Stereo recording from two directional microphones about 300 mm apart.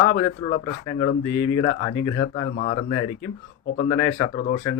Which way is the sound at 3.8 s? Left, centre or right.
Centre.